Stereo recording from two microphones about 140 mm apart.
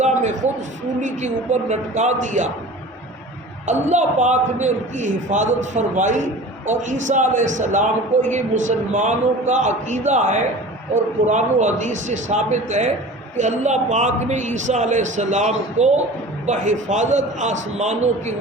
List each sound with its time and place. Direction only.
0.0 s a sound: 60° right (ahead or behind)
2.0 s a man's voice: 55° right (ahead or behind)
3.7 s a man's voice: 55° right (ahead or behind)